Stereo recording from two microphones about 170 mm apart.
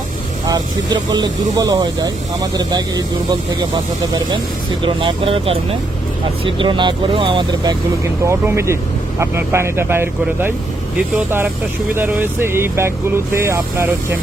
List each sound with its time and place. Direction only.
0.4 s speech: 25° right (ahead or behind)
4.8 s speech: 30° right (ahead or behind)